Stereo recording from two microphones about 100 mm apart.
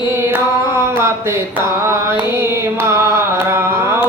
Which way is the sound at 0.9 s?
25° right (ahead or behind).